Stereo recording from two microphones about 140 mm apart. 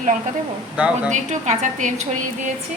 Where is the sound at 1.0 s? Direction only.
60° right (ahead or behind).